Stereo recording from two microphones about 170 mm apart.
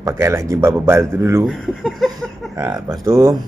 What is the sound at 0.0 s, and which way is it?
Speech, 15° right (ahead or behind).